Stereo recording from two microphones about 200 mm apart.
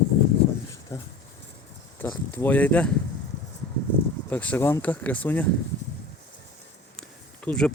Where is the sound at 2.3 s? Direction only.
10° left (ahead or behind).